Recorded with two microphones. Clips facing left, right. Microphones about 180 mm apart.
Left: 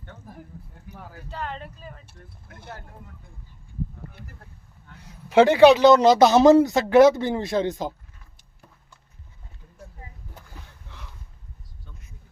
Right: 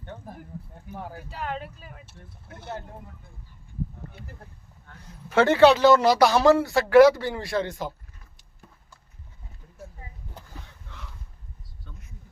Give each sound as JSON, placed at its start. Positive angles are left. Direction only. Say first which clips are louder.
{"t": 1.3, "sound": "speech", "louder": "left 1 dB", "side_deg": -10}
{"t": 5.3, "sound": "speech", "louder": "left 3 dB", "side_deg": 15}